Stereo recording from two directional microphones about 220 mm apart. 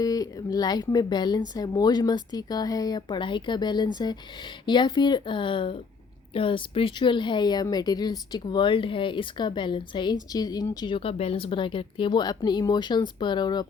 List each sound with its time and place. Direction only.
0.0 s speech: 15° left (ahead or behind)